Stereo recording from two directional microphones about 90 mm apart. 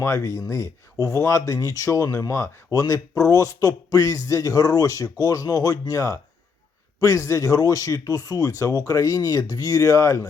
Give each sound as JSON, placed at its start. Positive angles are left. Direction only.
{"t": 0.0, "sound": "a man's voice", "side_deg": 30}
{"t": 2.7, "sound": "a man's voice", "side_deg": 40}